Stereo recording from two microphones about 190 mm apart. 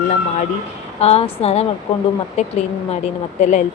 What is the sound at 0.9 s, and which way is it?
A woman's voice, 35° left (ahead or behind).